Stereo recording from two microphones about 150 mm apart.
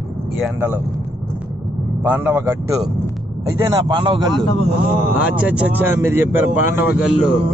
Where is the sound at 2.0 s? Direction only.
10° right (ahead or behind).